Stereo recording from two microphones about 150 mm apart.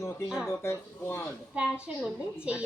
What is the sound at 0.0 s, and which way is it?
Speech, 20° left (ahead or behind).